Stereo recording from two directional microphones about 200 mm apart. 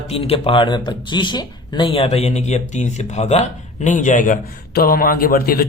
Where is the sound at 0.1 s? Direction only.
30° left (ahead or behind).